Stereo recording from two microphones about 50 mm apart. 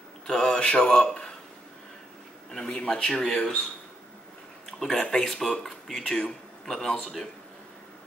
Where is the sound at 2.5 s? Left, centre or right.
Centre.